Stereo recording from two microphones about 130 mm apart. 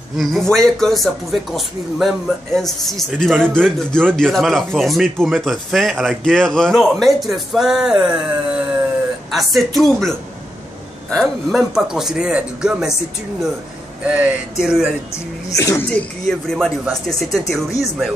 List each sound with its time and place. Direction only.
0.2 s speech: centre (ahead or behind)
14.0 s a sound: 10° right (ahead or behind)
15.5 s speech: 25° left (ahead or behind)
15.9 s speech: 5° left (ahead or behind)